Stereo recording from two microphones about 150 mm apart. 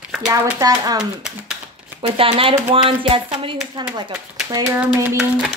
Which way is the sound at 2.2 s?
35° right (ahead or behind).